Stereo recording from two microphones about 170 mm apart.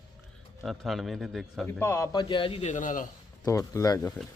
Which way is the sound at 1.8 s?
20° left (ahead or behind).